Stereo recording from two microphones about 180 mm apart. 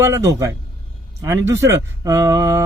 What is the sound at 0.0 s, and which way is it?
A man's voice, 20° right (ahead or behind).